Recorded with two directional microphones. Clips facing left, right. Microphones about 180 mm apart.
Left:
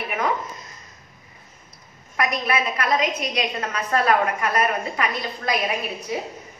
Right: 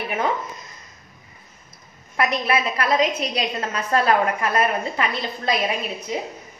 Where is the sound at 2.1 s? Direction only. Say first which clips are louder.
Right 2 dB; 30° right (ahead or behind).